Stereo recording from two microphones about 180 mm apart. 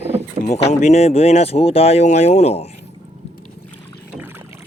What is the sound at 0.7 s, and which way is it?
Speech, 40° left (ahead or behind).